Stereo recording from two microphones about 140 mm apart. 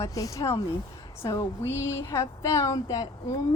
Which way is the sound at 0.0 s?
25° left (ahead or behind).